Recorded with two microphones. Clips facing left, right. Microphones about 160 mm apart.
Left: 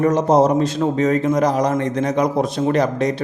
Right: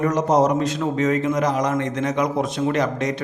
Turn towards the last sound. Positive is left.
turn(degrees=35)  # may be behind; listen again after turning